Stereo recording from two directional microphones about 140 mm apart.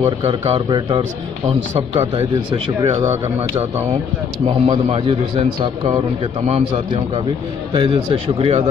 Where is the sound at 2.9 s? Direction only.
20° right (ahead or behind).